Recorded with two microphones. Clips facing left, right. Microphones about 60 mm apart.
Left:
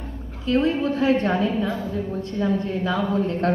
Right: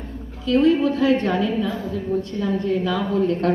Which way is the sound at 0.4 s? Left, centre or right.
Left.